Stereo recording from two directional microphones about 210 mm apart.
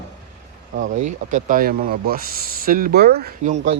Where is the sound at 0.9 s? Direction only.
40° right (ahead or behind).